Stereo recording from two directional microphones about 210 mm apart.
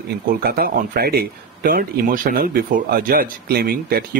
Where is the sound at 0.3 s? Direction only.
45° right (ahead or behind).